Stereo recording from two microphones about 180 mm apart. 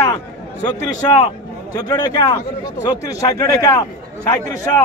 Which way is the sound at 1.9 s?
20° left (ahead or behind).